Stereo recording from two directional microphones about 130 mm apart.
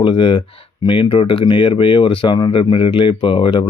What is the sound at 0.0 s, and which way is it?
Speech, 45° left (ahead or behind).